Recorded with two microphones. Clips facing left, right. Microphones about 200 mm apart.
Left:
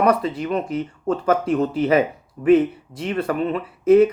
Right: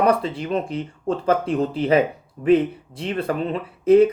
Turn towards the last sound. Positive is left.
turn(degrees=-30)  # may be behind; listen again after turning